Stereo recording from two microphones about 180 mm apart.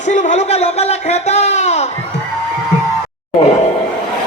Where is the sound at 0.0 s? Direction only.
40° left (ahead or behind).